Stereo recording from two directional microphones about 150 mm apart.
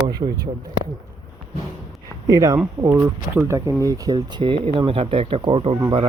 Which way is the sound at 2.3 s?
25° right (ahead or behind).